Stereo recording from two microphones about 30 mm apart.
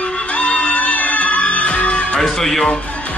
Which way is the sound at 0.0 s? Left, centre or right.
Left.